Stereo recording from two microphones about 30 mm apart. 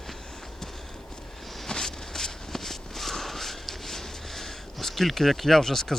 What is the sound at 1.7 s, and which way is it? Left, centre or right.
Walk, centre.